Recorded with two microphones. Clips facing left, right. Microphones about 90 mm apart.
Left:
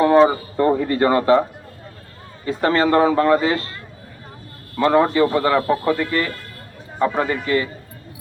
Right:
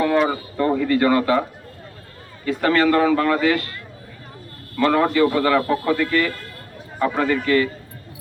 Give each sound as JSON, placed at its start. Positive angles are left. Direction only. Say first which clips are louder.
{"t": 0.0, "sound": "a man's voice", "louder": "left 5 dB", "side_deg": 25}
{"t": 4.8, "sound": "a man's voice", "louder": "left 1 dB", "side_deg": 25}